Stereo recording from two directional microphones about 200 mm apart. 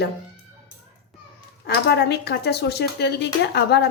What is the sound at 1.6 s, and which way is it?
Speech, 55° left (ahead or behind).